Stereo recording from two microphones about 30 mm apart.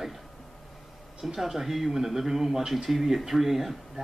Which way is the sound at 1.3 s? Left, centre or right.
Centre.